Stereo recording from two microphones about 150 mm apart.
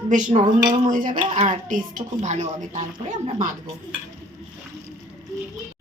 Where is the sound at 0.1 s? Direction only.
60° right (ahead or behind).